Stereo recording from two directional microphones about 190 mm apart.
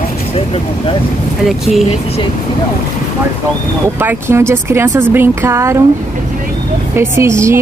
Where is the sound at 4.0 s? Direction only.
10° right (ahead or behind).